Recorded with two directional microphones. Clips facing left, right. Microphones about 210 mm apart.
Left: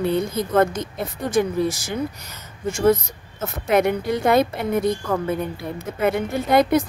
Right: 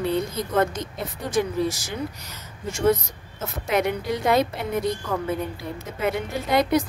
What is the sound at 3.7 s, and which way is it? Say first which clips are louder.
A woman's voice: left 5 dB; 50° left (ahead or behind).